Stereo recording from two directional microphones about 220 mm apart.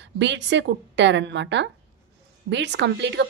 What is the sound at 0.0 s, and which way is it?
A woman's voice, 55° right (ahead or behind).